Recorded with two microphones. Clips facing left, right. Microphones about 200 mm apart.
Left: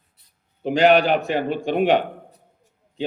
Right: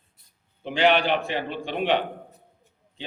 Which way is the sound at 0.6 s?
40° left (ahead or behind).